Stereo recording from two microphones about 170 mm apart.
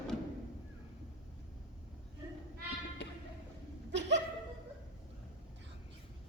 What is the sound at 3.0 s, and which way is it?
Music, 90° left.